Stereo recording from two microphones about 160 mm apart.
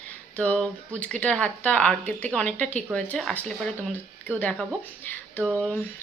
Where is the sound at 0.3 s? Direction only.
10° left (ahead or behind).